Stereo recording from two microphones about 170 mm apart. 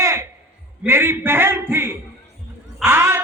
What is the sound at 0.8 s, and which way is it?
A man's voice, 15° right (ahead or behind).